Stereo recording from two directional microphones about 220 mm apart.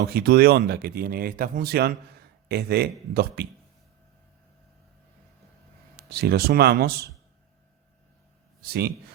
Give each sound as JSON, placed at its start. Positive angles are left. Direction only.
{"t": 0.1, "sound": "speech", "side_deg": -45}
{"t": 6.1, "sound": "speech", "side_deg": -45}
{"t": 8.6, "sound": "speech", "side_deg": -45}